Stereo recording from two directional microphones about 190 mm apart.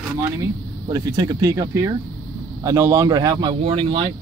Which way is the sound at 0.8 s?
20° right (ahead or behind).